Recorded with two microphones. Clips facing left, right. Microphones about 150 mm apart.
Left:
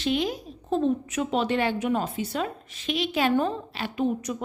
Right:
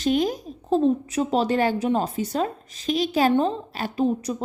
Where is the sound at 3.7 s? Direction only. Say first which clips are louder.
Right 3 dB; 40° right (ahead or behind).